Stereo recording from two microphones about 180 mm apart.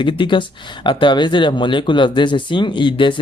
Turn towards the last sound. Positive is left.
turn(degrees=25)  # may be behind; listen again after turning